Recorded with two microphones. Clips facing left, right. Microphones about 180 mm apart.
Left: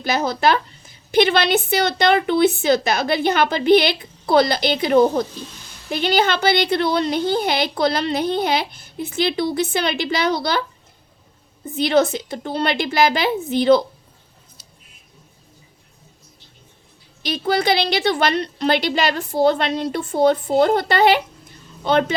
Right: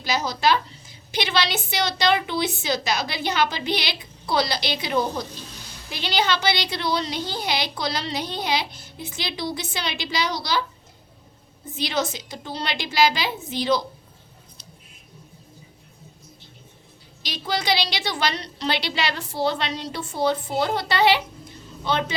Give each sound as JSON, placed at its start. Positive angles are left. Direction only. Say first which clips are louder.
{"t": 0.0, "sound": "a woman's voice", "louder": "left 4 dB", "side_deg": 55}
{"t": 11.8, "sound": "a woman's voice", "louder": "left 9 dB", "side_deg": 55}
{"t": 17.2, "sound": "a woman's voice", "louder": "left 6 dB", "side_deg": 55}